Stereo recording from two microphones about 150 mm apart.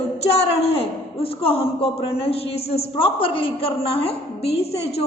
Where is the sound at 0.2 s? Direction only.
45° left (ahead or behind).